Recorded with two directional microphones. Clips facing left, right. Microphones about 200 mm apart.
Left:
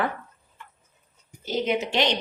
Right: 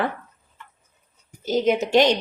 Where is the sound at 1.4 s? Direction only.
45° right (ahead or behind).